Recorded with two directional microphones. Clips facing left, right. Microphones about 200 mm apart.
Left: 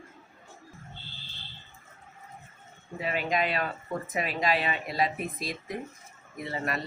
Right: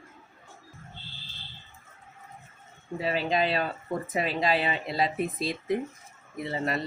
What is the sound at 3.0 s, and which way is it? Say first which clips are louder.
Speech: right 2 dB; 30° right (ahead or behind).